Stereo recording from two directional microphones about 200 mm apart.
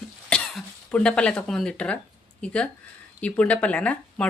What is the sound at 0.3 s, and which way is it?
Speech, 5° left (ahead or behind).